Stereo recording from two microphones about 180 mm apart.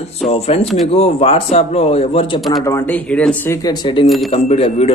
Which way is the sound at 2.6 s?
10° left (ahead or behind).